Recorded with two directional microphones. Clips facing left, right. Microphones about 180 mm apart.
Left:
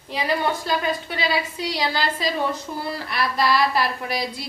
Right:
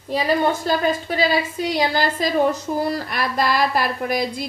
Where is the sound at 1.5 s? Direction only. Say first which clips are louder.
Right 4 dB; 50° right (ahead or behind).